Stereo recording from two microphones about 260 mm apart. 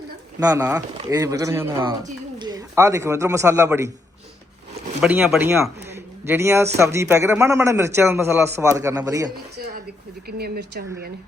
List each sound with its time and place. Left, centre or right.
0.3 s a man's voice: centre
4.9 s a man's voice: centre
9.6 s speech: right